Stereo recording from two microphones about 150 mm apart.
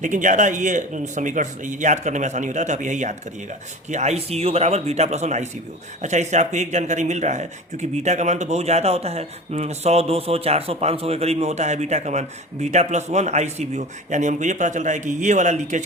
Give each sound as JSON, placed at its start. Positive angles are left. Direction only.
{"t": 0.0, "sound": "speech", "side_deg": -55}